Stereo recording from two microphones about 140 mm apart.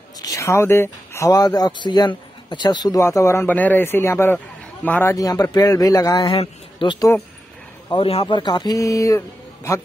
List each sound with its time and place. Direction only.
0.2 s a man's voice: 25° left (ahead or behind)
5.1 s speech: 25° left (ahead or behind)
6.3 s a man's voice: 40° left (ahead or behind)
8.2 s speech: 30° left (ahead or behind)